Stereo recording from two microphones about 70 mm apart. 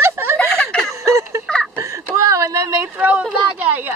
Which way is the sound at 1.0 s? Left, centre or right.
Right.